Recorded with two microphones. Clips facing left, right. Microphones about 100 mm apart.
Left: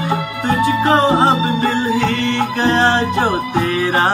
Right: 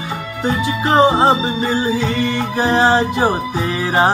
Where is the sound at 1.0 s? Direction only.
15° right (ahead or behind).